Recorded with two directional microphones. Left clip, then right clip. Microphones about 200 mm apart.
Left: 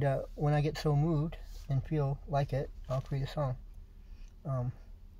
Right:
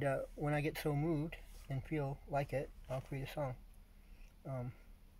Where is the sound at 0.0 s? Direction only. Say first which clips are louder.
Left 5 dB; 20° left (ahead or behind).